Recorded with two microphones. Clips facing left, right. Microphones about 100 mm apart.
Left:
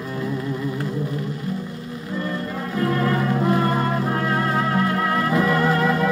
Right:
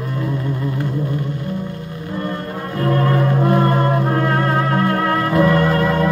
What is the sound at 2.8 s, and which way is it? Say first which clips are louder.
Music: right 4 dB; 30° right (ahead or behind).